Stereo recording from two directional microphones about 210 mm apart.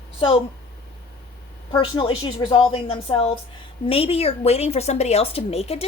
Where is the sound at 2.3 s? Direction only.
25° left (ahead or behind).